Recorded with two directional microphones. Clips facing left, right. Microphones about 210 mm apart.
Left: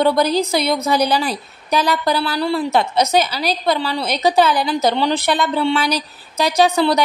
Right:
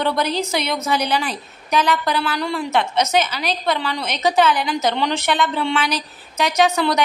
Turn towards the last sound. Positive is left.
turn(degrees=30)  # may be behind; listen again after turning